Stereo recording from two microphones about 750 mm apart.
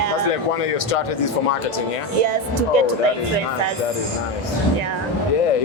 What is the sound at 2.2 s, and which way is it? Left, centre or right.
Speech, right.